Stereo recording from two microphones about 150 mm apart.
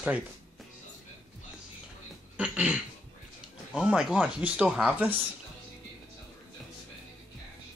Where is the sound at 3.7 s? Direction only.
5° right (ahead or behind).